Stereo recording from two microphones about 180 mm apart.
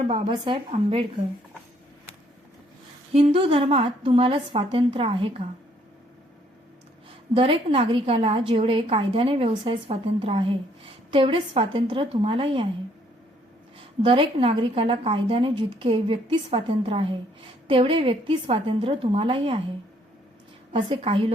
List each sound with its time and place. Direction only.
0.1 s a woman's voice: 30° right (ahead or behind)
3.1 s a woman's voice: 30° right (ahead or behind)
7.3 s a woman's voice: 30° right (ahead or behind)
13.7 s a woman's voice: 30° right (ahead or behind)
20.7 s a woman's voice: 30° right (ahead or behind)